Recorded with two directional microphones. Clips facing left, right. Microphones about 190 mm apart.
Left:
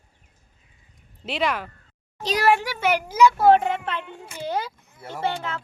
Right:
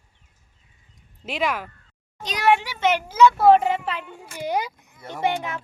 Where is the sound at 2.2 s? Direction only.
5° left (ahead or behind).